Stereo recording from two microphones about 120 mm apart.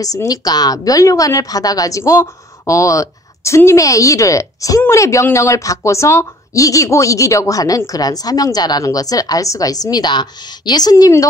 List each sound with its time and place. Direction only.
0.0 s a woman's voice: 30° left (ahead or behind)